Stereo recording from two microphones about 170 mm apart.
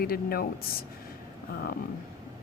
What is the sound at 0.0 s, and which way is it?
Speech, 60° left (ahead or behind).